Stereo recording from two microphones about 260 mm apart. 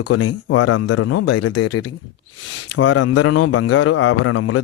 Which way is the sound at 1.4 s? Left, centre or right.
Left.